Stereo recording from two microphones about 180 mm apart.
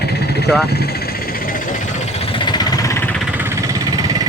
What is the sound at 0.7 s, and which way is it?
Speech, 65° left (ahead or behind).